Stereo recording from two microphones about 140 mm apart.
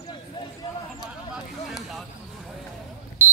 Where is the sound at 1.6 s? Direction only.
Centre (ahead or behind).